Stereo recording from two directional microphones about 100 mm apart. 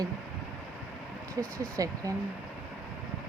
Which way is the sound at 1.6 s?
35° right (ahead or behind).